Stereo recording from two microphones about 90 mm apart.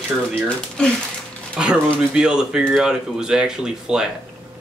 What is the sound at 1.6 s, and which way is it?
Speech, 10° right (ahead or behind).